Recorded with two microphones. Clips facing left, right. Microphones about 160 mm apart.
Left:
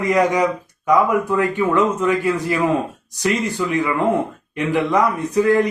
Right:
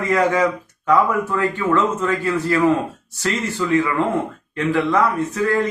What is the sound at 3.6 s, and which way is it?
Speech, 15° left (ahead or behind).